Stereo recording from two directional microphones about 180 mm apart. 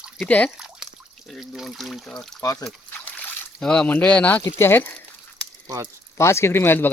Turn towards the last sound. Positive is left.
turn(degrees=10)  # may be behind; listen again after turning